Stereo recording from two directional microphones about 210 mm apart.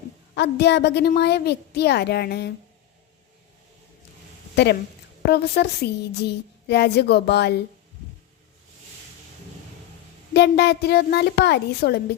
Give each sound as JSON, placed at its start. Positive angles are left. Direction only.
{"t": 0.3, "sound": "a child's voice", "side_deg": 50}
{"t": 4.5, "sound": "a child's voice", "side_deg": 50}
{"t": 10.3, "sound": "a child's voice", "side_deg": 50}